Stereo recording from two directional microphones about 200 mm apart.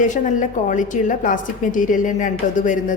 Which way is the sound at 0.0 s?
40° left (ahead or behind).